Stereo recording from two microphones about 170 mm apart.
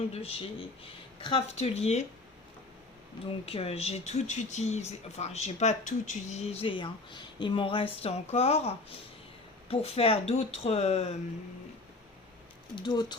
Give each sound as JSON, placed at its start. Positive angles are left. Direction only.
{"t": 0.1, "sound": "speech", "side_deg": 35}
{"t": 3.4, "sound": "speech", "side_deg": 35}
{"t": 12.7, "sound": "speech", "side_deg": 25}